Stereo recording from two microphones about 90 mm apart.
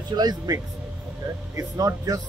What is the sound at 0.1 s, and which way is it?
Speech, 50° right (ahead or behind).